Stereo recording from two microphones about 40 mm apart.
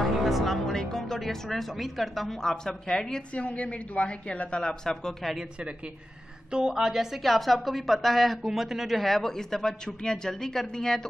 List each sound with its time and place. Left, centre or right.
0.0 s music: centre
2.4 s speech: centre
3.3 s a woman's voice: left; by 5.1 s centre
6.5 s a woman's voice: centre
7.2 s a woman's voice: centre
9.0 s speech: centre